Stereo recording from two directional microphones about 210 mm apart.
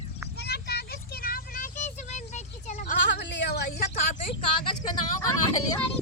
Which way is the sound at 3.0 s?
55° left (ahead or behind).